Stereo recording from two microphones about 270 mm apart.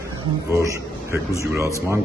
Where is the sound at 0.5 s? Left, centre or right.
Centre.